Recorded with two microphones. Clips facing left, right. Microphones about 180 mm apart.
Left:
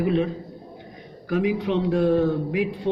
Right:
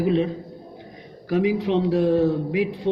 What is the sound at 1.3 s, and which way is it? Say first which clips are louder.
Speech: right 2 dB; 35° right (ahead or behind).